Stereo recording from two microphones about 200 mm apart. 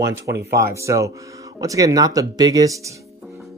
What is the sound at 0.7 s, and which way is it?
Speech, 15° right (ahead or behind).